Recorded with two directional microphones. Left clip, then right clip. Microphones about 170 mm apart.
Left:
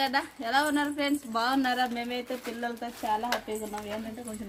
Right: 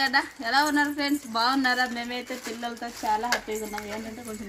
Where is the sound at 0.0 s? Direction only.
40° left (ahead or behind).